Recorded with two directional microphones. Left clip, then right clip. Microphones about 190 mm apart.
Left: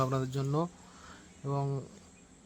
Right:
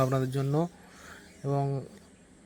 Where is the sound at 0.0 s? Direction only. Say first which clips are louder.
Right 4 dB; 20° right (ahead or behind).